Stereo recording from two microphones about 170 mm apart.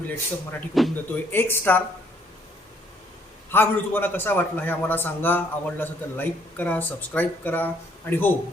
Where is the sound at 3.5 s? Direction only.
10° left (ahead or behind).